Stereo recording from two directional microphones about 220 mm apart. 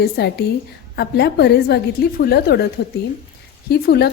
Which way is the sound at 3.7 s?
45° left (ahead or behind).